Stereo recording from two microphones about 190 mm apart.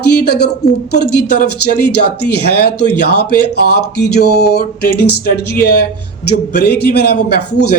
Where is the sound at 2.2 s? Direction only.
60° left (ahead or behind).